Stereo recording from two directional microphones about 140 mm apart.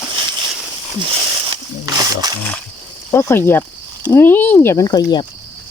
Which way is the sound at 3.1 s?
15° left (ahead or behind).